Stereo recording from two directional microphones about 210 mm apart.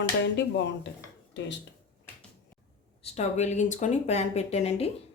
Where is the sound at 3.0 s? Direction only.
30° left (ahead or behind).